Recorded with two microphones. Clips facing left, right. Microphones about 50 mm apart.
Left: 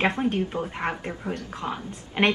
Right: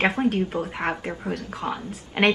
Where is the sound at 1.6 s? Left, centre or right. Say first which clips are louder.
Right 2 dB; centre.